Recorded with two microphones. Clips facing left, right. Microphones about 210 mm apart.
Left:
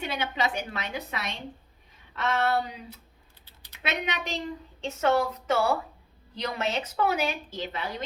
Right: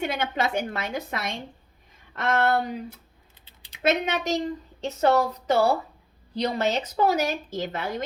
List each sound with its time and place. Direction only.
0.0 s a woman's voice: 50° right (ahead or behind)
3.8 s a woman's voice: 45° right (ahead or behind)